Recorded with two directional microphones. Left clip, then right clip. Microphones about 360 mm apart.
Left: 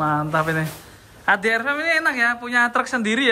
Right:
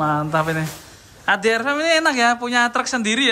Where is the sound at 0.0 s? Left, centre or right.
Centre.